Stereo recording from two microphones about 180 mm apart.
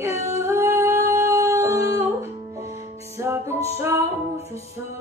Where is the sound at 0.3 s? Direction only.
15° right (ahead or behind).